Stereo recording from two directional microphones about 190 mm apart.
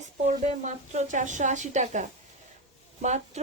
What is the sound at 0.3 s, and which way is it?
Speech, 40° right (ahead or behind).